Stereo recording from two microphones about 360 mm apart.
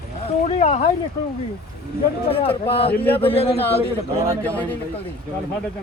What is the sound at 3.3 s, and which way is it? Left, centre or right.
Speech, centre.